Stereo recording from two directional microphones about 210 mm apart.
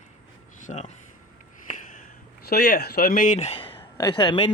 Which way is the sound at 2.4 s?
45° left (ahead or behind).